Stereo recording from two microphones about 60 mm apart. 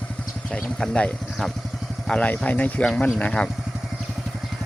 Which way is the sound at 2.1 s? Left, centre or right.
Centre.